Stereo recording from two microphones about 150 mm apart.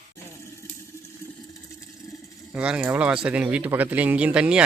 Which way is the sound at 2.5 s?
5° right (ahead or behind).